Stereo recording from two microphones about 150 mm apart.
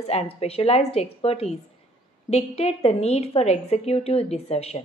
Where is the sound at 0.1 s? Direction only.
40° left (ahead or behind).